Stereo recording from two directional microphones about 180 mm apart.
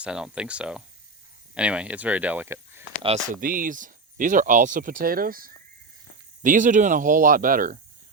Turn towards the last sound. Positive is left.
turn(degrees=-50)  # may be behind; listen again after turning